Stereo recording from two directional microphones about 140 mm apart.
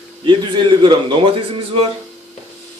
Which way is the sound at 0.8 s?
35° right (ahead or behind).